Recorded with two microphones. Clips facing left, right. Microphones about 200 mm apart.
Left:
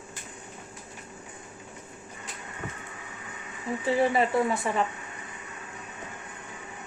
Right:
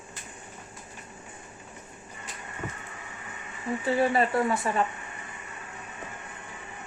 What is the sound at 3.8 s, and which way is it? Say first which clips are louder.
Speech: even; 15° left (ahead or behind).